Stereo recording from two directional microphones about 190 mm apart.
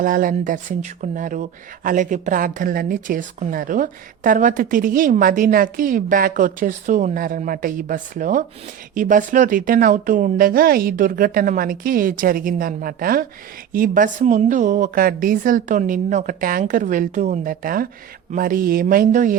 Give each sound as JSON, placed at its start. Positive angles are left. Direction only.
{"t": 0.0, "sound": "speech", "side_deg": -45}